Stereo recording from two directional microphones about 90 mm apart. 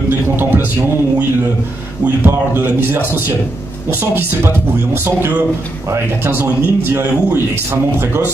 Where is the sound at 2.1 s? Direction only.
25° right (ahead or behind).